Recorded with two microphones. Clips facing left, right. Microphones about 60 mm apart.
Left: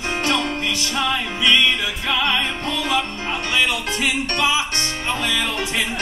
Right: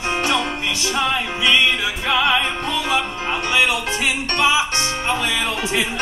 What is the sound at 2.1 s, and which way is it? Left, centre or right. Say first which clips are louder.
Music: right 3 dB; centre.